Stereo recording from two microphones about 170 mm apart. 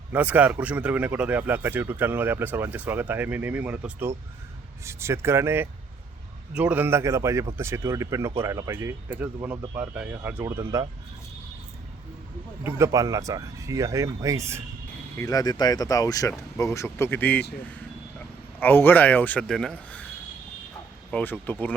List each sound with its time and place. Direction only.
0.1 s a man's voice: 10° right (ahead or behind)
12.6 s speech: 15° right (ahead or behind)
15.2 s speech: 20° left (ahead or behind)
18.6 s speech: 10° left (ahead or behind)
21.1 s speech: 10° left (ahead or behind)